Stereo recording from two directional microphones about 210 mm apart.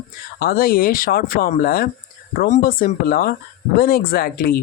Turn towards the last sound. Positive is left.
turn(degrees=45)  # may be behind; listen again after turning